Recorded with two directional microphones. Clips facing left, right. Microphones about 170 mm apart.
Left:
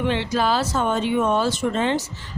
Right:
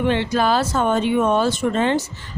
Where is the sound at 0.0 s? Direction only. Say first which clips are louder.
Right 3 dB; 55° right (ahead or behind).